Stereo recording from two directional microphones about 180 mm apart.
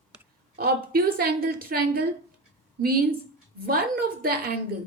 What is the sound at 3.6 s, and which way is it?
Speech, 55° right (ahead or behind).